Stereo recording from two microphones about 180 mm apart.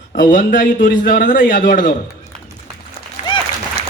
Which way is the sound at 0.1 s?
50° left (ahead or behind).